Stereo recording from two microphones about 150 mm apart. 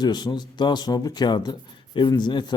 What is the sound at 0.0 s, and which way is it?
Speech, 30° left (ahead or behind).